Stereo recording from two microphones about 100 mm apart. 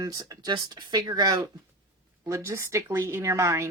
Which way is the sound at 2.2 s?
30° right (ahead or behind).